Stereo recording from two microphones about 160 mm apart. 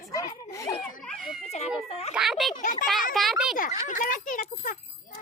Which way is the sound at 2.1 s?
Centre (ahead or behind).